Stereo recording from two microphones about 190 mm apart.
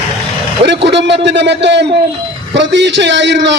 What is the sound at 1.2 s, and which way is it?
A man's voice, 65° right (ahead or behind).